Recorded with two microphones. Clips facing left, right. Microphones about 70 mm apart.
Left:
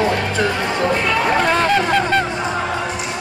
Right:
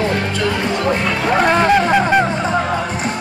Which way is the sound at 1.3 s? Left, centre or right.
Centre.